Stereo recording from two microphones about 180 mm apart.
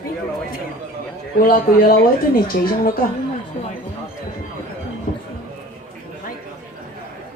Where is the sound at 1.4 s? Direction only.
55° left (ahead or behind).